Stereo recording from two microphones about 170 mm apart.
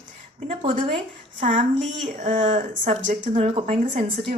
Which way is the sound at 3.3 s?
35° right (ahead or behind).